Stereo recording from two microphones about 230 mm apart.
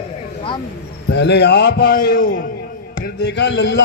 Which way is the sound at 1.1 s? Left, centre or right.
Left.